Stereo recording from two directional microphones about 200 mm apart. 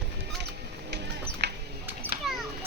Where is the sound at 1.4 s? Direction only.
55° right (ahead or behind).